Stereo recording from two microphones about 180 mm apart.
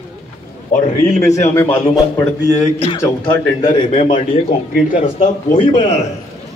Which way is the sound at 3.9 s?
40° left (ahead or behind).